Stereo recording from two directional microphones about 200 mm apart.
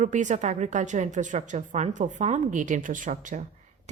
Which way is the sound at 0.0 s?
40° right (ahead or behind).